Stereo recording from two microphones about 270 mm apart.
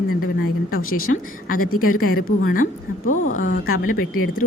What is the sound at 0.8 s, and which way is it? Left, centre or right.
Speech, left.